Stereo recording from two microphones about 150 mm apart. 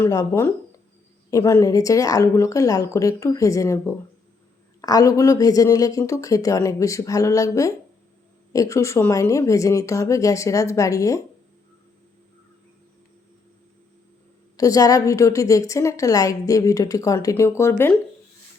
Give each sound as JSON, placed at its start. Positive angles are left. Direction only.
{"t": 0.0, "sound": "a woman's voice", "side_deg": 20}
{"t": 14.5, "sound": "a woman's voice", "side_deg": 25}